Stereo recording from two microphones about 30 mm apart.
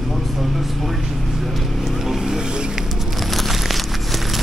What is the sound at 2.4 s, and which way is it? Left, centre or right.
Vehicle, right.